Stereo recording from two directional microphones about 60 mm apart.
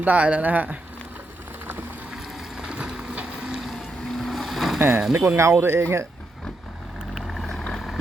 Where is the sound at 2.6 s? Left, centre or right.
Right.